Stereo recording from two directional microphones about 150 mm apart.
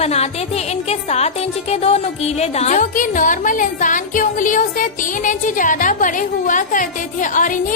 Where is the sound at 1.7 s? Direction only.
45° left (ahead or behind).